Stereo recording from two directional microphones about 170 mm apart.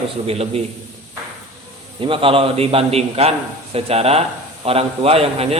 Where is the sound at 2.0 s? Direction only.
30° right (ahead or behind).